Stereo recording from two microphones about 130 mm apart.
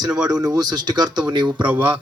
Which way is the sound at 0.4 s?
30° right (ahead or behind).